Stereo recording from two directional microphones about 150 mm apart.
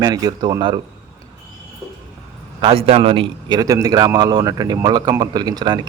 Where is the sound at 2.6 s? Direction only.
35° right (ahead or behind).